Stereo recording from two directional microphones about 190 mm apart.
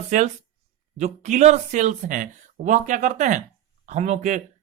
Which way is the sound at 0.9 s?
40° right (ahead or behind).